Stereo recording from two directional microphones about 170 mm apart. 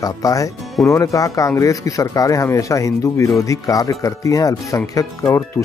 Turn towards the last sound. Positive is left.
turn(degrees=15)  # may be behind; listen again after turning